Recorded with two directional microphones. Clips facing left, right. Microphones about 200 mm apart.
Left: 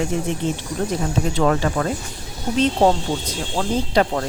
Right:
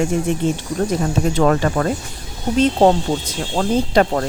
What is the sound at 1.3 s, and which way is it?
Speech, 50° right (ahead or behind).